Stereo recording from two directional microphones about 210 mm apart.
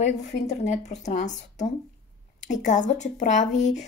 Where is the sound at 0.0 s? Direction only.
35° left (ahead or behind).